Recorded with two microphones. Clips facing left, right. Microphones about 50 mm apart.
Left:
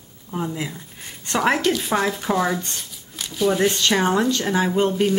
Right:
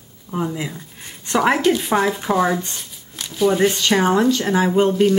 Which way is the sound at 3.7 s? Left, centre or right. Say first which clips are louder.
Right 2 dB; centre.